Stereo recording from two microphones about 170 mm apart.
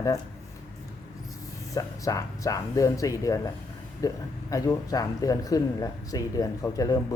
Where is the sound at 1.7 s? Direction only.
20° left (ahead or behind).